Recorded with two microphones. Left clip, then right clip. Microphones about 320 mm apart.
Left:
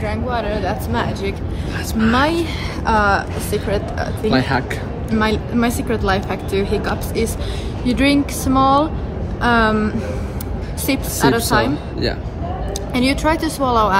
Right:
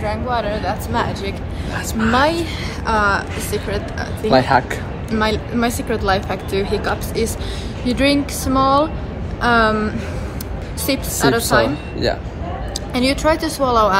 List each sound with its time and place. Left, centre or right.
0.0 s speech: centre
2.9 s speech: centre
4.3 s speech: centre
5.1 s speech: centre
11.1 s speech: centre
12.9 s speech: centre